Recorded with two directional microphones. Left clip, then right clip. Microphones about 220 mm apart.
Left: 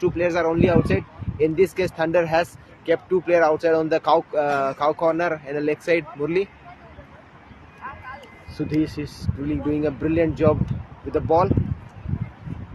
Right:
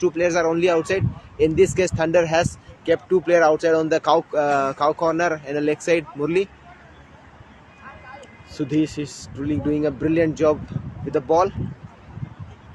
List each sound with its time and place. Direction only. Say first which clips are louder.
0.0 s speech: right 2 dB; 25° right (ahead or behind)
8.5 s speech: right 2 dB; 30° right (ahead or behind)